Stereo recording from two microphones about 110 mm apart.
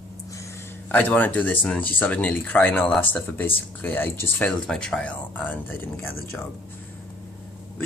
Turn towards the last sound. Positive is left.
turn(degrees=20)  # may be behind; listen again after turning